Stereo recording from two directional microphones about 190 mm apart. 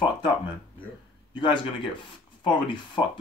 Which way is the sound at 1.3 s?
25° left (ahead or behind).